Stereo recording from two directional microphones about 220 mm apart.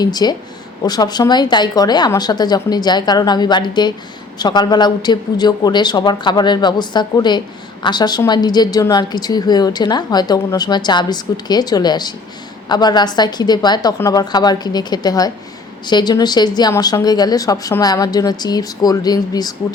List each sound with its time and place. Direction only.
0.0 s a woman's voice: 20° left (ahead or behind)